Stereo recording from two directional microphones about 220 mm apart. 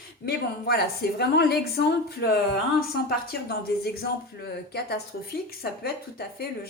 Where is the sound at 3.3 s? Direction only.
45° left (ahead or behind).